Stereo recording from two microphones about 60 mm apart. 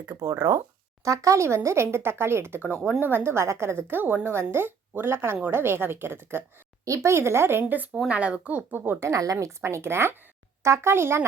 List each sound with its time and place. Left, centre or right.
0.1 s speech: right
1.0 s a woman's voice: right
6.8 s speech: right
8.1 s speech: right
8.8 s a woman's voice: right
9.0 s speech: right
9.6 s speech: right